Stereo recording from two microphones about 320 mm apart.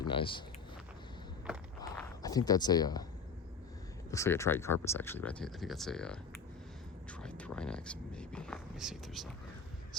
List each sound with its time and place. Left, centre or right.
0.0 s speech: centre
1.8 s a sound: centre
4.1 s speech: centre